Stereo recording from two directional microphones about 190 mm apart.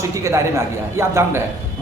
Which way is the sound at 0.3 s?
15° right (ahead or behind).